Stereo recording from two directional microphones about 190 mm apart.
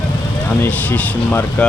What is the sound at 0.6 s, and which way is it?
Speech, 10° left (ahead or behind).